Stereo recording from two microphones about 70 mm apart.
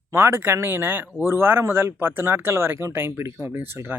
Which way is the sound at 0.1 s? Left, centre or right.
Right.